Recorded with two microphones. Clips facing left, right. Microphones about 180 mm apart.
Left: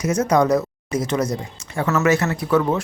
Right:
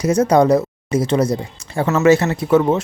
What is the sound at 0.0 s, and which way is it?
Speech, 30° right (ahead or behind).